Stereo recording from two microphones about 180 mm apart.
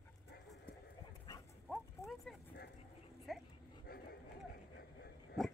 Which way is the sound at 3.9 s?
55° left (ahead or behind).